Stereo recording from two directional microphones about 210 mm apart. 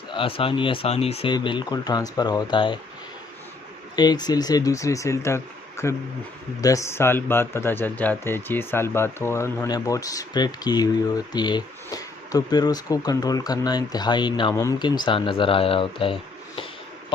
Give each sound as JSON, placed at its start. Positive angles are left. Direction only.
{"t": 0.1, "sound": "speech", "side_deg": 25}
{"t": 3.9, "sound": "speech", "side_deg": 20}